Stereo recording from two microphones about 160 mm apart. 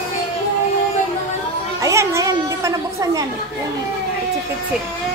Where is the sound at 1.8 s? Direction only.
20° right (ahead or behind).